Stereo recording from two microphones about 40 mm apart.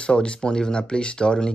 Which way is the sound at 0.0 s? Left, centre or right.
Left.